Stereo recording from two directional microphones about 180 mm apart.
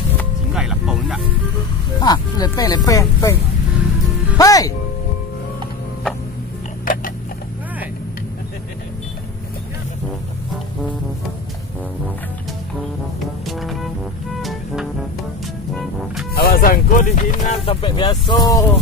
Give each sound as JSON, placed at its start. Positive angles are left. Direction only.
{"t": 0.6, "sound": "music", "side_deg": 0}
{"t": 2.0, "sound": "speech", "side_deg": 20}
{"t": 4.4, "sound": "speech", "side_deg": 20}
{"t": 6.8, "sound": "a sound", "side_deg": 50}
{"t": 13.5, "sound": "music", "side_deg": 0}
{"t": 16.3, "sound": "music", "side_deg": 55}
{"t": 17.6, "sound": "speech", "side_deg": 30}